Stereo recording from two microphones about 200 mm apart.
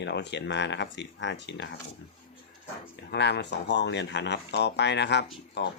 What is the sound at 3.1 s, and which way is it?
Speech, 60° left (ahead or behind).